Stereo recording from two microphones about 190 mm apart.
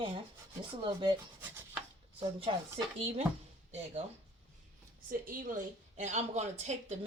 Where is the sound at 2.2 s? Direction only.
30° right (ahead or behind).